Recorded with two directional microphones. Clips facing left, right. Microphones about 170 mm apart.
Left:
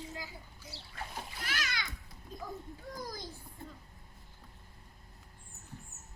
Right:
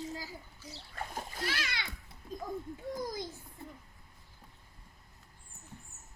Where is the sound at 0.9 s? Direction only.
45° right (ahead or behind).